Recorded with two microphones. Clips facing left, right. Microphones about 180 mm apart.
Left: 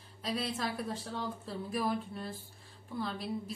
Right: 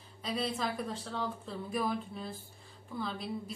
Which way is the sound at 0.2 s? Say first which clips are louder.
Right 1 dB; centre (ahead or behind).